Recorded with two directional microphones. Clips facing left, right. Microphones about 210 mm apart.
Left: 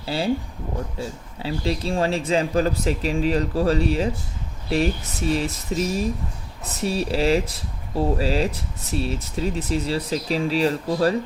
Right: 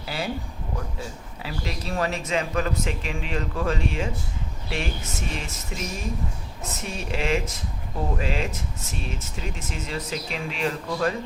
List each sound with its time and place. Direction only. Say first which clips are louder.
0.0 s speech: left 7 dB; 30° left (ahead or behind)